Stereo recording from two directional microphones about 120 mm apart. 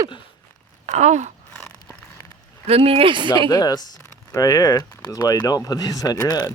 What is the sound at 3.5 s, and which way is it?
Speech, 35° left (ahead or behind).